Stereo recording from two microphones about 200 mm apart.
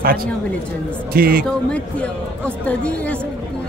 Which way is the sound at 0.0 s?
45° right (ahead or behind).